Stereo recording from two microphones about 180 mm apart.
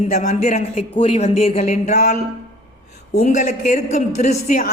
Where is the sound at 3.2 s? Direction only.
40° left (ahead or behind).